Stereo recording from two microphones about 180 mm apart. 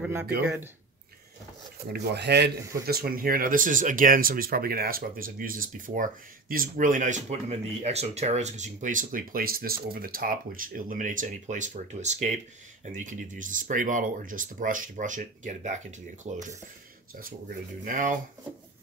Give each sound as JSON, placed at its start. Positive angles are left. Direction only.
{"t": 0.0, "sound": "speech", "side_deg": -10}
{"t": 1.9, "sound": "speech", "side_deg": -65}
{"t": 2.9, "sound": "speech", "side_deg": -55}
{"t": 17.8, "sound": "speech", "side_deg": -45}